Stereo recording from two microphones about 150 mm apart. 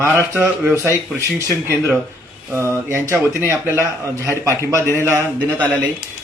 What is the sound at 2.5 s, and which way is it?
A man's voice, 15° right (ahead or behind).